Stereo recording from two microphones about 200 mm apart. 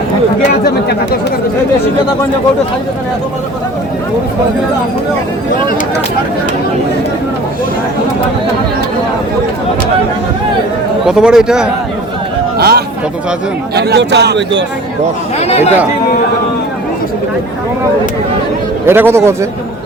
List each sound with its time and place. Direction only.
0.6 s speech: 50° left (ahead or behind)
11.0 s a man's voice: 5° right (ahead or behind)
12.5 s a man's voice: 55° right (ahead or behind)
15.4 s speech: 30° left (ahead or behind)
18.9 s speech: 10° right (ahead or behind)